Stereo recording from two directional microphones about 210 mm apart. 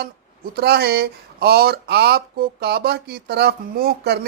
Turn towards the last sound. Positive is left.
turn(degrees=-50)  # may be behind; listen again after turning